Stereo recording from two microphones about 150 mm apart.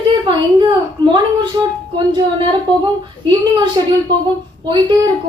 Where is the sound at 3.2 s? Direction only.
30° right (ahead or behind).